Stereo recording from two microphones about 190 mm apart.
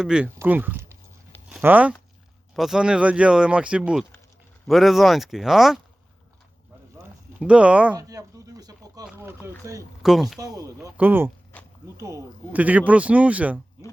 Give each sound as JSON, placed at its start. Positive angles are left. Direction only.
{"t": 0.0, "sound": "speech", "side_deg": -5}
{"t": 7.3, "sound": "speech", "side_deg": -5}
{"t": 7.9, "sound": "a sound", "side_deg": -20}
{"t": 9.0, "sound": "speech", "side_deg": -10}
{"t": 10.0, "sound": "speech", "side_deg": 0}
{"t": 10.3, "sound": "speech", "side_deg": -20}
{"t": 11.5, "sound": "a sound", "side_deg": 10}
{"t": 11.9, "sound": "speech", "side_deg": -15}